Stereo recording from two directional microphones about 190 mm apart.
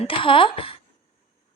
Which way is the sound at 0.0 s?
30° left (ahead or behind).